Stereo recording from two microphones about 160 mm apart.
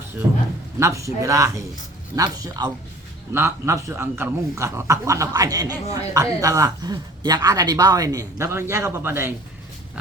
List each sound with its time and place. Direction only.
0.8 s speech: 20° right (ahead or behind)